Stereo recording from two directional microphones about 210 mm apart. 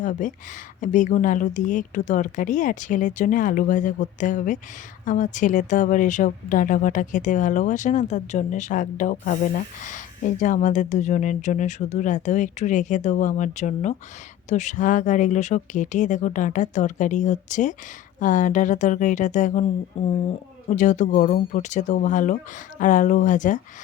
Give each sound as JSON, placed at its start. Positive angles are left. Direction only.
{"t": 0.0, "sound": "speech", "side_deg": 35}
{"t": 20.7, "sound": "speech", "side_deg": 35}